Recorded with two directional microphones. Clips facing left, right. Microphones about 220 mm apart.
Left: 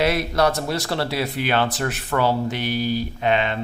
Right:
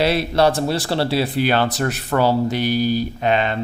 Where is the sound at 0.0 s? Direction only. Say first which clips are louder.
Right 3 dB; 30° right (ahead or behind).